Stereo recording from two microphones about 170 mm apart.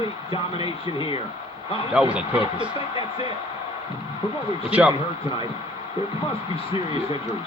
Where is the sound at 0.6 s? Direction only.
30° left (ahead or behind).